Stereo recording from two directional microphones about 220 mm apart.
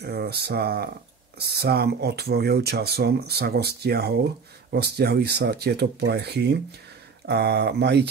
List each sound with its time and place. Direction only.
0.0 s speech: 45° right (ahead or behind)